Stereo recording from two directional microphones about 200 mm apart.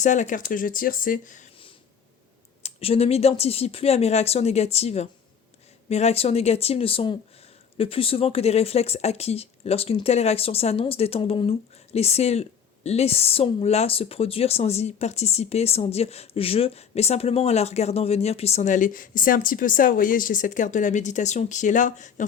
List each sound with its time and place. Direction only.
0.0 s speech: 40° left (ahead or behind)
2.6 s speech: 30° left (ahead or behind)